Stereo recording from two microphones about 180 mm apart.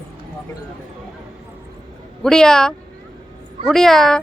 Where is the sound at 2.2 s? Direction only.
5° left (ahead or behind).